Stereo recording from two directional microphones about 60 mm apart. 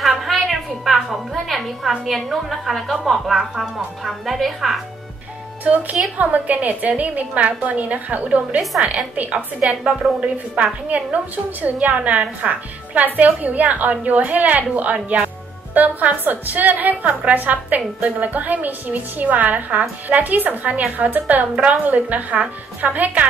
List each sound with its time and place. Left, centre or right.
0.0 s a woman's voice: centre
5.6 s a woman's voice: right